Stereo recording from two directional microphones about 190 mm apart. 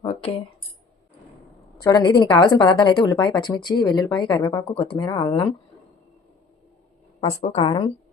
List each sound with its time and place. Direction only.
0.0 s a sound: 30° left (ahead or behind)
1.8 s a woman's voice: 20° left (ahead or behind)
7.2 s a woman's voice: 30° left (ahead or behind)